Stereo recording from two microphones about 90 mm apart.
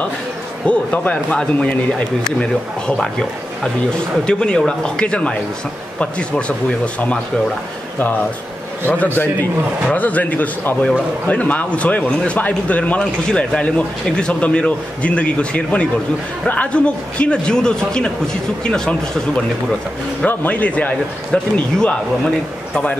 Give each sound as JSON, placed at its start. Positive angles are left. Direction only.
{"t": 0.7, "sound": "a man's voice", "side_deg": 15}
{"t": 8.8, "sound": "a man's voice", "side_deg": 20}